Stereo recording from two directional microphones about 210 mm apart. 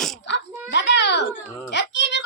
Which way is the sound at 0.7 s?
55° left (ahead or behind).